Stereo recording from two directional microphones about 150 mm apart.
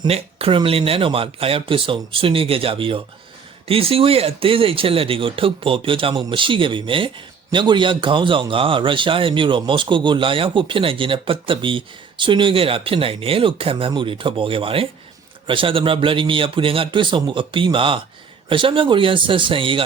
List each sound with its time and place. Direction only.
0.1 s speech: 40° right (ahead or behind)